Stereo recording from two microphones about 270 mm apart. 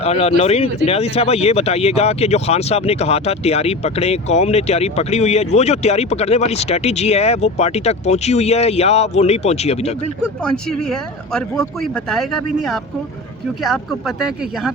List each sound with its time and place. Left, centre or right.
0.0 s speech: left
10.4 s speech: centre
14.2 s speech: centre